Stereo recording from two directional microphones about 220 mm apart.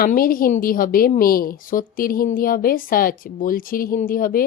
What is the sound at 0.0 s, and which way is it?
A woman's voice, 40° left (ahead or behind).